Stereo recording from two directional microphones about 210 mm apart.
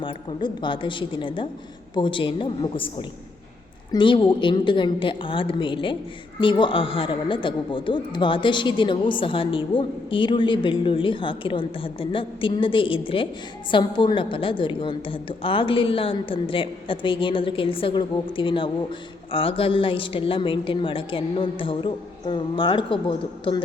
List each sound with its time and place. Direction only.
0.0 s speech: 25° left (ahead or behind)
3.9 s speech: 20° left (ahead or behind)